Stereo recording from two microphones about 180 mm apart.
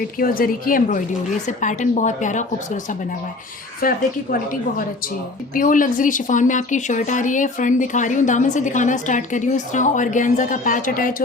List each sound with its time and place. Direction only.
0.2 s speech: 50° left (ahead or behind)
3.8 s speech: 50° left (ahead or behind)
5.5 s speech: 50° left (ahead or behind)